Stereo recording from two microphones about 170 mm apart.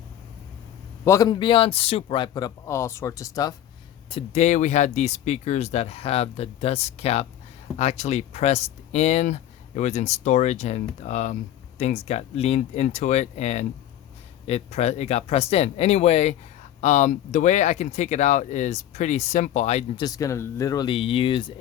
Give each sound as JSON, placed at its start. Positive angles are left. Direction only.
{"t": 1.0, "sound": "a man's voice", "side_deg": 20}
{"t": 4.1, "sound": "speech", "side_deg": 40}
{"t": 20.1, "sound": "a man's voice", "side_deg": 20}